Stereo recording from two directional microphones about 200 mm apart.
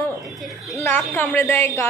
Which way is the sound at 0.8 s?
10° left (ahead or behind).